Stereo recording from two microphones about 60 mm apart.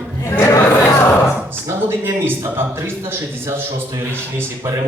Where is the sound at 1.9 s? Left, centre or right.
Right.